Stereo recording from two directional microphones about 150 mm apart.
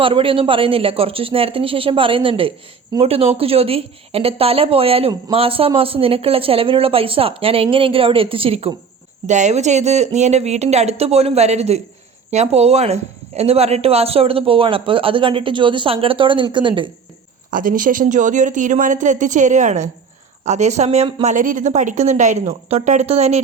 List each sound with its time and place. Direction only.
0.0 s speech: 35° right (ahead or behind)
9.2 s speech: 50° right (ahead or behind); by 16.9 s 35° right (ahead or behind)
17.5 s speech: 65° right (ahead or behind); by 21.3 s 45° right (ahead or behind)
21.3 s speech: 65° right (ahead or behind); by 23.4 s 45° right (ahead or behind)